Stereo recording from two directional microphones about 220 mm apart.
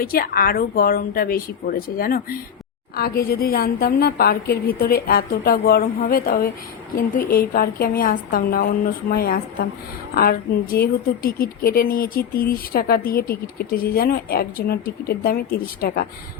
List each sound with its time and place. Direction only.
0.0 s a woman's voice: 40° left (ahead or behind)